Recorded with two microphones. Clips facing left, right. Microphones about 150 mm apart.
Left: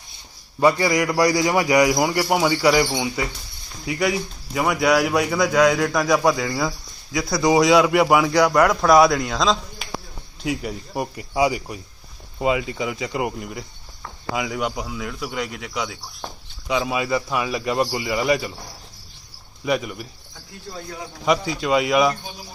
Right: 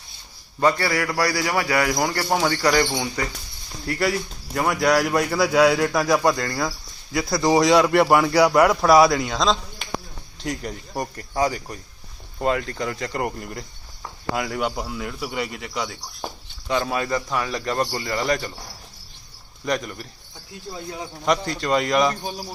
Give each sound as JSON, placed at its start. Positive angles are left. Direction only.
{"t": 0.6, "sound": "a man's voice", "side_deg": 15}
{"t": 19.6, "sound": "a man's voice", "side_deg": 5}
{"t": 20.7, "sound": "speech", "side_deg": -20}
{"t": 21.2, "sound": "a man's voice", "side_deg": 5}
{"t": 22.2, "sound": "speech", "side_deg": -40}